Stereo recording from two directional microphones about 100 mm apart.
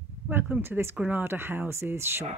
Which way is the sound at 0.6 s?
25° right (ahead or behind).